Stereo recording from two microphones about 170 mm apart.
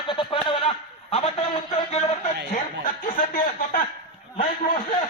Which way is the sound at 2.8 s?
55° left (ahead or behind).